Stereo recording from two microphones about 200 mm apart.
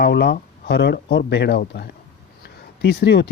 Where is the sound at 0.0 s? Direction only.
55° left (ahead or behind).